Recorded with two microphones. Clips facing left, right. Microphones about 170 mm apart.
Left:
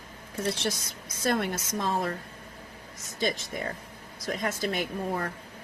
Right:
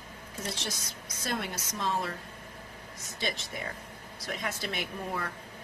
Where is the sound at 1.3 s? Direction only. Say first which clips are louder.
Left 7 dB; 55° left (ahead or behind).